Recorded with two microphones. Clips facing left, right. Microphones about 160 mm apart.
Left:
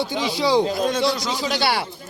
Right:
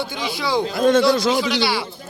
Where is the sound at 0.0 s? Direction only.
35° left (ahead or behind).